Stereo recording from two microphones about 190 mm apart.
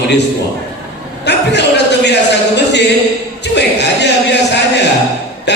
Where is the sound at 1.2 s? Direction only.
65° left (ahead or behind).